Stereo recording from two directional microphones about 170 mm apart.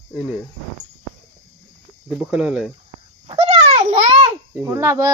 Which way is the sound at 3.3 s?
40° right (ahead or behind).